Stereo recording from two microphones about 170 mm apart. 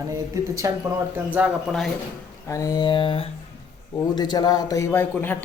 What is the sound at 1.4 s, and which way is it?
Speech, 10° right (ahead or behind).